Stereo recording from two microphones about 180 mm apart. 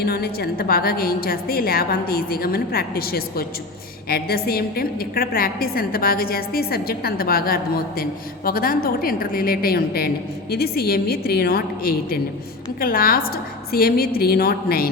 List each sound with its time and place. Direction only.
0.0 s a woman's voice: 60° left (ahead or behind)